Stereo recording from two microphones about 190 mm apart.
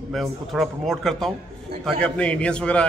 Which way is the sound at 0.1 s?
Centre (ahead or behind).